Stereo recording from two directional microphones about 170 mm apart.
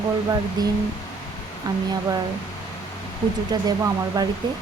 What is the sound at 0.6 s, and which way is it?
Speech, 25° right (ahead or behind).